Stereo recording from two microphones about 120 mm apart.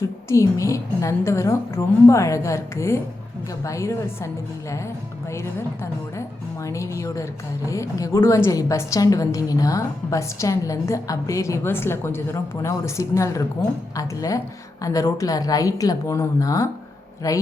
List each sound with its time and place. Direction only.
0.3 s a woman's voice: 25° left (ahead or behind)
5.3 s a woman's voice: 25° left (ahead or behind)